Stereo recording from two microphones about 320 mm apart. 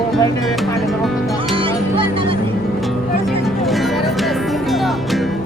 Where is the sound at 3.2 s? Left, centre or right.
Centre.